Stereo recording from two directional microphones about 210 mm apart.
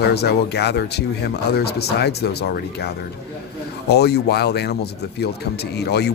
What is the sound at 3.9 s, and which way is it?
Speech, 50° left (ahead or behind).